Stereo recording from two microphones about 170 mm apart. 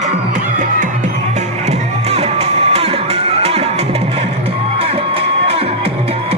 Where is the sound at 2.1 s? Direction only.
35° right (ahead or behind).